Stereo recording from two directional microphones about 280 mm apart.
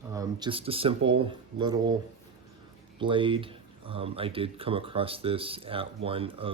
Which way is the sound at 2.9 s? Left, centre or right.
Centre.